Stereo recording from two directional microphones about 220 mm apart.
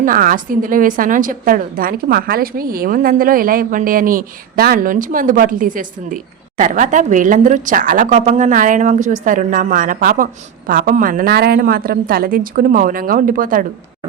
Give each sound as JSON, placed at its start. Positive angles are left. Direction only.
{"t": 0.0, "sound": "a woman's voice", "side_deg": -40}